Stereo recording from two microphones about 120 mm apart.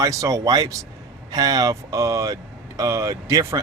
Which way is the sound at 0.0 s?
25° right (ahead or behind).